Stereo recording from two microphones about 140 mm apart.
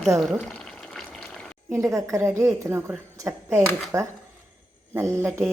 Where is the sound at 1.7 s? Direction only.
20° right (ahead or behind).